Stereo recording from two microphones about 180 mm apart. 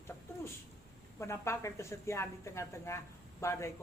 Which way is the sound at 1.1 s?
15° left (ahead or behind).